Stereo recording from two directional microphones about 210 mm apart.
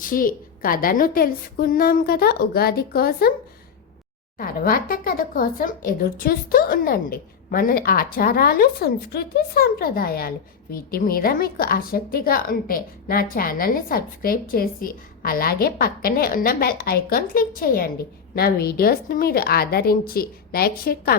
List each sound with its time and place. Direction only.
0.0 s speech: 40° left (ahead or behind)
4.4 s speech: 45° left (ahead or behind)